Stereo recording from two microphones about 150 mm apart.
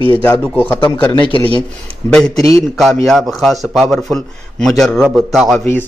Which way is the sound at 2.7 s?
Centre (ahead or behind).